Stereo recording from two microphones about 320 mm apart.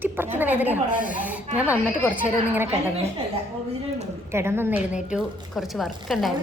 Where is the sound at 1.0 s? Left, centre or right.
Left.